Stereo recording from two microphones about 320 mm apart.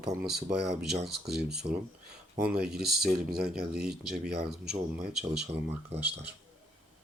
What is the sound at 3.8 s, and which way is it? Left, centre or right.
Speech, centre.